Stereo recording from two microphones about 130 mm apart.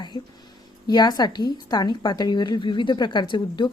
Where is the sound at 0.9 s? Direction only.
30° left (ahead or behind).